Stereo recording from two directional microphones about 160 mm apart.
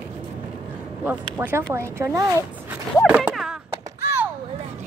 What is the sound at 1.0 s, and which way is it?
Speech, 10° right (ahead or behind).